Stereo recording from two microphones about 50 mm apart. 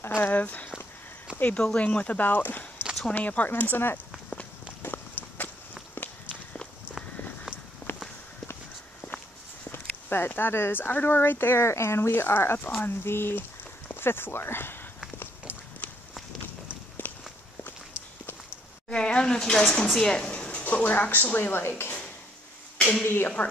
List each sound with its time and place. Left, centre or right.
0.1 s a woman's voice: left
1.3 s a sound: left
1.6 s a woman's voice: left
4.8 s run: left
7.8 s walk: left
9.7 s speech: left
12.1 s speech: left
15.8 s run: left
17.0 s walk: left
18.9 s speech: centre
20.2 s a sound: left
20.6 s a woman's voice: left
23.0 s speech: left